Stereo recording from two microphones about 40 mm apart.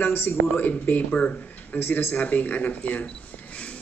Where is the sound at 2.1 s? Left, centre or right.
Left.